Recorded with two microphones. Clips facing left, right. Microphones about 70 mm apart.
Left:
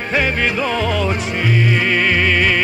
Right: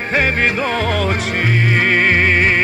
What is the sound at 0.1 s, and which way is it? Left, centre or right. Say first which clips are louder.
Music: right 1 dB; right.